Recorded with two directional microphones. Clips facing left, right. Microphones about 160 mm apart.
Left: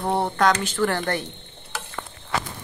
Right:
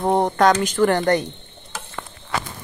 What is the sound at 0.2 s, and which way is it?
Speech, 20° right (ahead or behind).